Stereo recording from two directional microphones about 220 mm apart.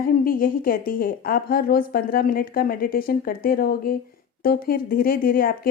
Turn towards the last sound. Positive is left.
turn(degrees=40)  # may be behind; listen again after turning